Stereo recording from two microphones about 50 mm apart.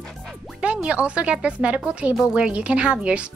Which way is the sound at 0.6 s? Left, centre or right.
Right.